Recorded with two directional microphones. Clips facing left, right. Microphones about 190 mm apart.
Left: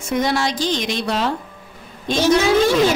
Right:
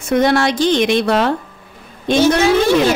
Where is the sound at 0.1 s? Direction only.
60° right (ahead or behind).